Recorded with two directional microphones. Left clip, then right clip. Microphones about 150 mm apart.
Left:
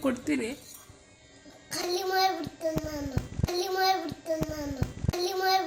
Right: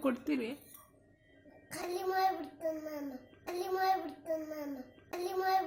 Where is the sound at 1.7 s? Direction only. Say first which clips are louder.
Left 7 dB; 5° right (ahead or behind).